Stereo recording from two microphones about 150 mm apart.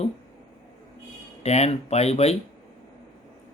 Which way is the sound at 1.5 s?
45° left (ahead or behind).